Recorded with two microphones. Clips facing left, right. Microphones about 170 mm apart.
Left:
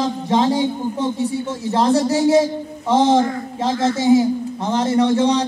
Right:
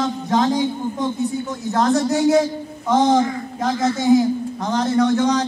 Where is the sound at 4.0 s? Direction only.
5° left (ahead or behind).